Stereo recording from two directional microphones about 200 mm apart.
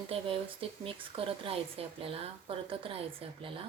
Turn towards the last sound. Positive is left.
turn(degrees=-25)  # may be behind; listen again after turning